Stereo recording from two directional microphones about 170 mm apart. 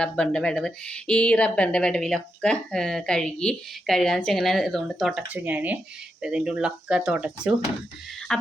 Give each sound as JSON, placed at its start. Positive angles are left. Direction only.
{"t": 0.0, "sound": "speech", "side_deg": 5}
{"t": 8.3, "sound": "speech", "side_deg": 5}